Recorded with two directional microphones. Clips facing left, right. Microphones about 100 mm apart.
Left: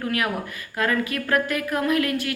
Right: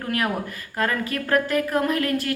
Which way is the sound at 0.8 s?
40° right (ahead or behind).